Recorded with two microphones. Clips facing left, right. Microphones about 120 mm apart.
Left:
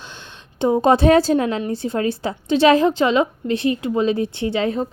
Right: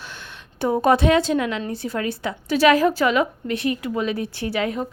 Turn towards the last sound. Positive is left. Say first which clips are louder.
# left 3 dB
turn(degrees=30)  # may be behind; listen again after turning